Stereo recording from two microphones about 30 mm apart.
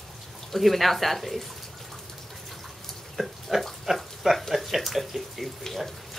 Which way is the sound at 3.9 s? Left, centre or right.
Right.